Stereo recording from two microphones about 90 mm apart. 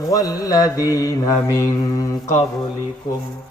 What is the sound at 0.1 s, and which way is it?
A man's voice, 40° left (ahead or behind).